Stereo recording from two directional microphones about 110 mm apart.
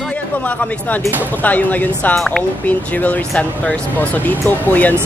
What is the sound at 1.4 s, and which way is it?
Speech, 15° left (ahead or behind).